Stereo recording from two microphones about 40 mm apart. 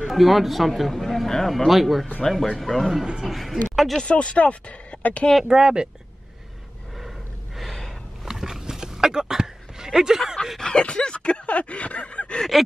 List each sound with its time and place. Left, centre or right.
0.1 s speech: centre
1.7 s speech: centre
2.2 s speech: centre
3.3 s speech: centre
4.0 s speech: left
5.4 s speech: centre
7.5 s gasp: centre
8.3 s a sound: centre
10.6 s a sound: left